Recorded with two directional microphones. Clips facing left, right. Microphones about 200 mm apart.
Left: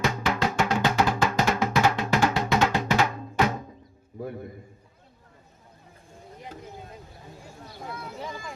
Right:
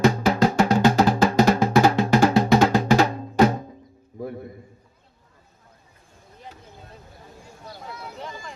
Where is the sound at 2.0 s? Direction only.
35° right (ahead or behind).